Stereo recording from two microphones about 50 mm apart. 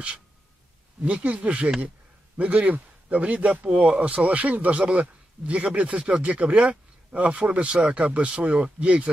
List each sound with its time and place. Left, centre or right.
1.0 s speech: right